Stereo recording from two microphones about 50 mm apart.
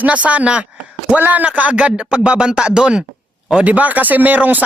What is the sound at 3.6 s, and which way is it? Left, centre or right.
Speech, right.